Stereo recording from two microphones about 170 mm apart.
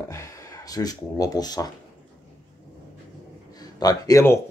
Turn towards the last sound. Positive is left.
turn(degrees=20)  # may be behind; listen again after turning